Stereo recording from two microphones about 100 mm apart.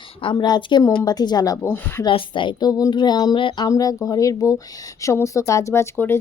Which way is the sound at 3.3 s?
55° left (ahead or behind).